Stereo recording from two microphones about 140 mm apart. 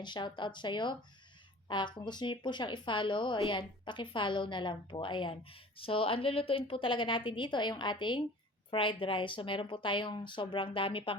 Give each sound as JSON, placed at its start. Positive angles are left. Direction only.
{"t": 0.0, "sound": "speech", "side_deg": 35}